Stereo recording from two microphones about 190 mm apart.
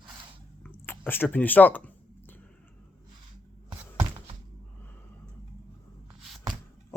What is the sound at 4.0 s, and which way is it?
Thunk, 25° right (ahead or behind).